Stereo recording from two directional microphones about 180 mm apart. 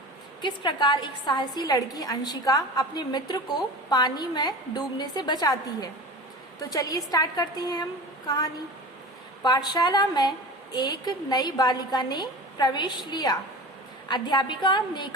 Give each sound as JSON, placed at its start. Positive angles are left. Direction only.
{"t": 0.4, "sound": "a woman's voice", "side_deg": 25}
{"t": 9.4, "sound": "a woman's voice", "side_deg": 25}